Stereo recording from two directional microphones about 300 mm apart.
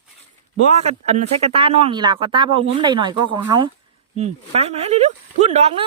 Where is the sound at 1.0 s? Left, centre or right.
Right.